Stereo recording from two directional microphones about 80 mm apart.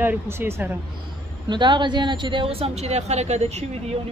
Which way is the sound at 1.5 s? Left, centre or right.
Right.